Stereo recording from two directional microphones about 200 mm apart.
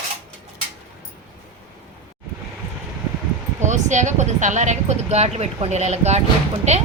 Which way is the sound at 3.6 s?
35° right (ahead or behind).